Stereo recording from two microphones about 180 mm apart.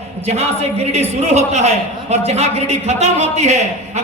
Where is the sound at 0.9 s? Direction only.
35° right (ahead or behind).